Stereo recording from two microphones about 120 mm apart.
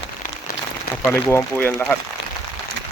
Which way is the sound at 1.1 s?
20° left (ahead or behind).